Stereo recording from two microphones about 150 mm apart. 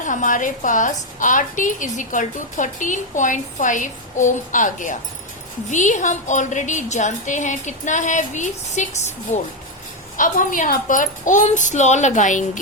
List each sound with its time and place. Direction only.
0.0 s a woman's voice: 60° left (ahead or behind)
10.2 s a woman's voice: 65° left (ahead or behind)